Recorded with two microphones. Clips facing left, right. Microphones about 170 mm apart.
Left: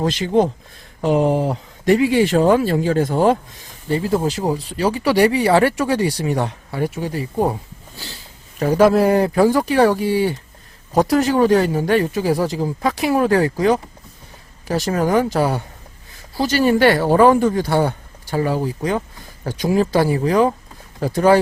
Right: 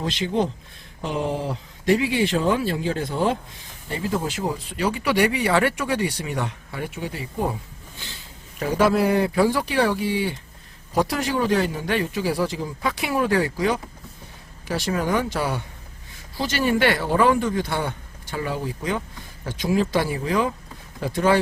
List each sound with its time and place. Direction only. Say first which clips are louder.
0.0 s speech: left 7 dB; 45° left (ahead or behind)
3.8 s speech: left 7 dB; 30° left (ahead or behind)
8.5 s speech: left 6 dB; 45° left (ahead or behind)